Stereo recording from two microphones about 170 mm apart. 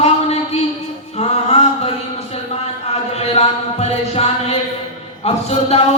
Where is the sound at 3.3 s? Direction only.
35° left (ahead or behind).